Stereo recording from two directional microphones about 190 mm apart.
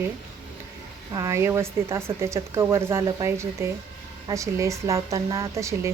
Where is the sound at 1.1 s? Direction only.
15° right (ahead or behind).